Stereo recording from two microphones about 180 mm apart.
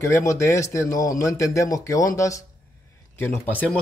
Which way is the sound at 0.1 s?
15° left (ahead or behind).